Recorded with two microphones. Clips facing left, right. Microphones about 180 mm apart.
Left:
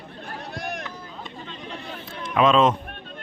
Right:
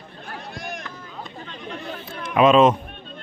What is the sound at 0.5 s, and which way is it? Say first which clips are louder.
Run: left 3 dB; 60° left (ahead or behind).